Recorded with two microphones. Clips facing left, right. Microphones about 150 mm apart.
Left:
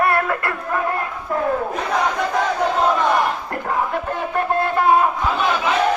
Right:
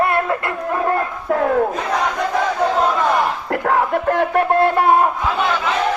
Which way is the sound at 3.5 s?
75° right (ahead or behind).